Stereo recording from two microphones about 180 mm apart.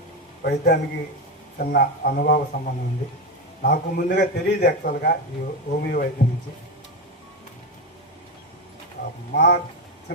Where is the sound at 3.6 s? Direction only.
60° left (ahead or behind).